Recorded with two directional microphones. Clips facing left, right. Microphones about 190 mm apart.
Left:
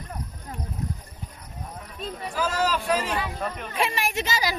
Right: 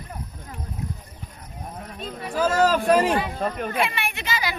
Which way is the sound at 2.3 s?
50° right (ahead or behind).